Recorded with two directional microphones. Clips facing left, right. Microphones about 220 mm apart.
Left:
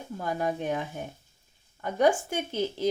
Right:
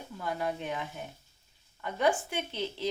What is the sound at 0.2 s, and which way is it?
A woman's voice, 45° left (ahead or behind).